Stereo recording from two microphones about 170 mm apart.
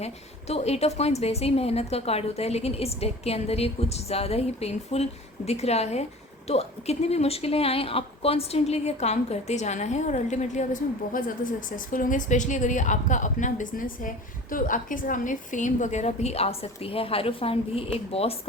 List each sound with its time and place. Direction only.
0.0 s a woman's voice: 40° left (ahead or behind)